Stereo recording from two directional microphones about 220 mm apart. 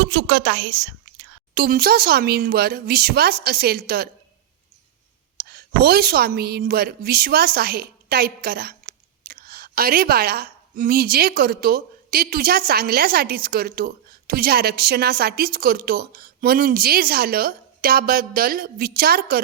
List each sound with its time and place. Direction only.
0.0 s a woman's voice: 50° right (ahead or behind)
5.4 s a woman's voice: 45° right (ahead or behind)